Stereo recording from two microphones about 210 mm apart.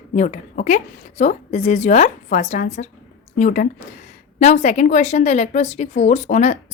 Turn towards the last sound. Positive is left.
turn(degrees=35)  # may be behind; listen again after turning